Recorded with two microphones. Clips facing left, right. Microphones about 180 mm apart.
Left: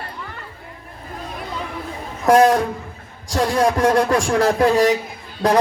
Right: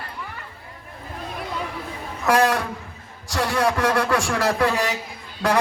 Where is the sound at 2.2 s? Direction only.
40° left (ahead or behind).